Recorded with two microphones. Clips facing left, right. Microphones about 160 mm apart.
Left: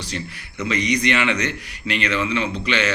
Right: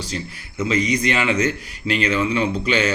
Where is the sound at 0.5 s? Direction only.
25° right (ahead or behind).